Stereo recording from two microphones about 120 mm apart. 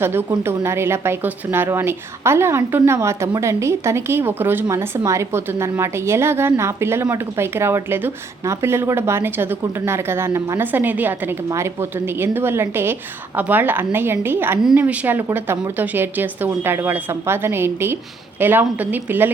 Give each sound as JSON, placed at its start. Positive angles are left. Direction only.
{"t": 0.0, "sound": "a woman's voice", "side_deg": -20}